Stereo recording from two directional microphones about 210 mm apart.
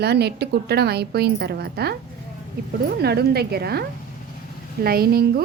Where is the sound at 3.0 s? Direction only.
50° right (ahead or behind).